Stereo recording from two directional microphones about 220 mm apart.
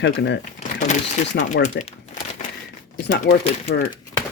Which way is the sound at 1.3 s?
50° left (ahead or behind).